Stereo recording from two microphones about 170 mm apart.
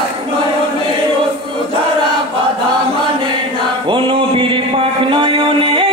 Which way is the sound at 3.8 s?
30° right (ahead or behind).